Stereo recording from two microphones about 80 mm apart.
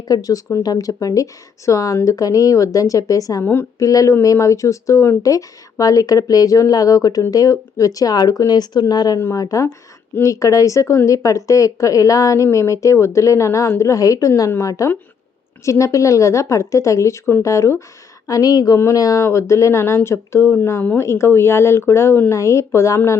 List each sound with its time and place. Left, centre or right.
0.1 s speech: left
3.4 s a woman's voice: left
3.8 s speech: left
9.1 s a woman's voice: left
18.3 s speech: left
18.8 s a woman's voice: left